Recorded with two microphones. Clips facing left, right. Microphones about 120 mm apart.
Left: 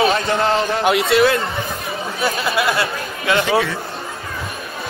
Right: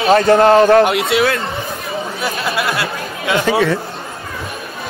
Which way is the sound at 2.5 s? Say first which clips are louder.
Left 1 dB; centre (ahead or behind).